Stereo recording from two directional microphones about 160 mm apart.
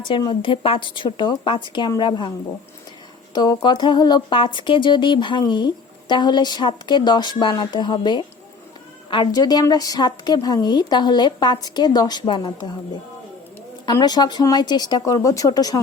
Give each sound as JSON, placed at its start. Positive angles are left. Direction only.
{"t": 0.1, "sound": "speech", "side_deg": 30}
{"t": 3.3, "sound": "speech", "side_deg": 25}
{"t": 13.8, "sound": "speech", "side_deg": 25}